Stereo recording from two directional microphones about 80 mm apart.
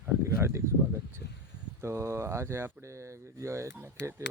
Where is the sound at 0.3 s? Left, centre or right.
Right.